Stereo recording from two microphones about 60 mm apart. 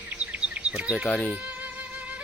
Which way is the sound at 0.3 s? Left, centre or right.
Centre.